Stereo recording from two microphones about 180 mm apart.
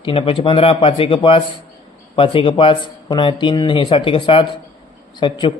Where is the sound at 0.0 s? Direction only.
30° left (ahead or behind).